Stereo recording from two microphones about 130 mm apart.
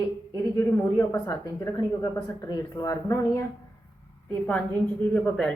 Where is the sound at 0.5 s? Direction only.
15° left (ahead or behind).